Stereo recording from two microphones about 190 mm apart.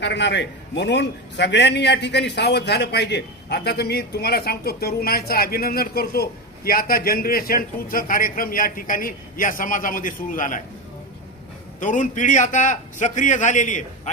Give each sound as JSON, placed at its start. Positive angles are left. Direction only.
{"t": 0.0, "sound": "a man's voice", "side_deg": 65}
{"t": 11.8, "sound": "a man's voice", "side_deg": 40}